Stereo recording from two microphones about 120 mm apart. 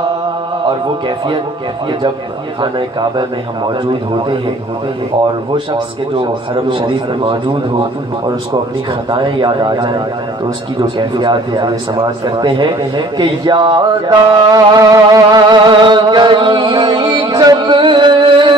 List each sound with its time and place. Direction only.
0.7 s a man's voice: 45° right (ahead or behind)
2.6 s speech: 40° right (ahead or behind)
5.5 s a man's voice: 45° right (ahead or behind)
9.1 s speech: 40° right (ahead or behind)